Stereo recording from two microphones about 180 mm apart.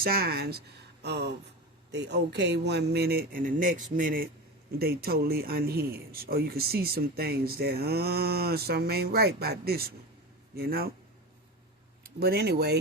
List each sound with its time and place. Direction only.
0.0 s speech: 55° right (ahead or behind)
12.0 s speech: 60° right (ahead or behind)